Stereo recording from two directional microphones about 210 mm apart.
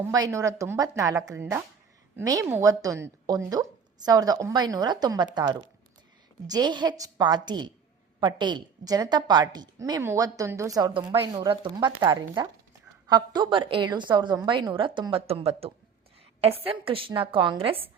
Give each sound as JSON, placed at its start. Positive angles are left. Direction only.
{"t": 0.1, "sound": "a woman's voice", "side_deg": -15}